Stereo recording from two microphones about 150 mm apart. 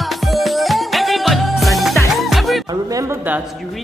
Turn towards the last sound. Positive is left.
turn(degrees=0)  # may be behind; listen again after turning